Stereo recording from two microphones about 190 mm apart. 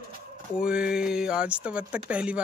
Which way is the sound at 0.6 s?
5° right (ahead or behind).